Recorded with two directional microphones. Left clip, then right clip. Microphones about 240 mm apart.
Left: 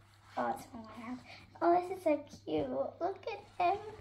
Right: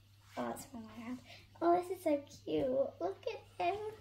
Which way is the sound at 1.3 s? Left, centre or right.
Right.